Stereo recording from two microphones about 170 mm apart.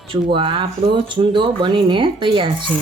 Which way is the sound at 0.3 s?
30° right (ahead or behind).